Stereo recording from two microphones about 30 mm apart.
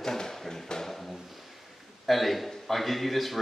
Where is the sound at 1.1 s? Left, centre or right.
Centre.